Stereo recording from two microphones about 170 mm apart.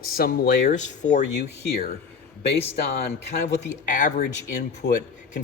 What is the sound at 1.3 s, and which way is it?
Speech, 80° left.